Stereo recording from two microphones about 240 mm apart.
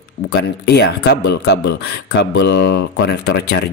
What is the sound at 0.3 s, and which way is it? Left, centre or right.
Speech, left.